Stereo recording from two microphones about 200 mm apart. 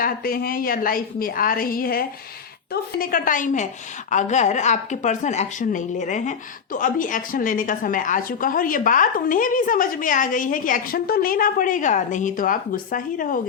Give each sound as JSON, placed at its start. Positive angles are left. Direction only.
{"t": 0.0, "sound": "a woman's voice", "side_deg": 45}